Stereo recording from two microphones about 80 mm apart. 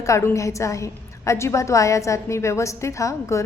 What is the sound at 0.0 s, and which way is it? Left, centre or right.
A woman's voice, left.